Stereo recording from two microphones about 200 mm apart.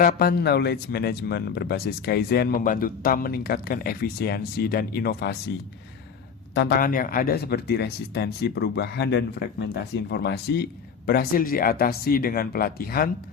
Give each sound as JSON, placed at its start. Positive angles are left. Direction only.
{"t": 0.0, "sound": "speech", "side_deg": 50}
{"t": 6.5, "sound": "speech", "side_deg": 55}